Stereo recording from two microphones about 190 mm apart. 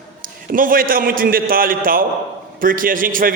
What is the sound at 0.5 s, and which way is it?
A man's voice, 45° right (ahead or behind).